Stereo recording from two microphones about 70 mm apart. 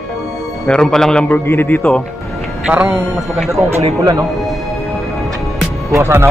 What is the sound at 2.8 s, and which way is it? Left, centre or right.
Speech, centre.